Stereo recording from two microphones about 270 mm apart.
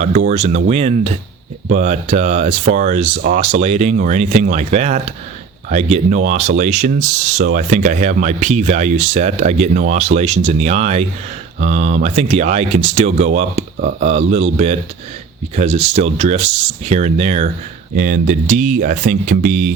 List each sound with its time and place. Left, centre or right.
0.3 s speech: right